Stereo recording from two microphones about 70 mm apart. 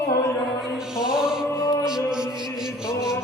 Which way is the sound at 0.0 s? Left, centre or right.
Left.